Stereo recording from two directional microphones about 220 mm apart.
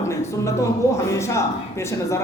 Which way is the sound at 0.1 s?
15° left (ahead or behind).